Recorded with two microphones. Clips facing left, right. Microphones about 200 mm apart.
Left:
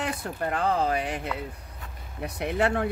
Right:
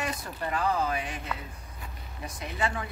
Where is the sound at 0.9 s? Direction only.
65° left (ahead or behind).